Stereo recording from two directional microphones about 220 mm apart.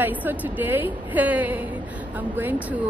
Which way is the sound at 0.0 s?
10° right (ahead or behind).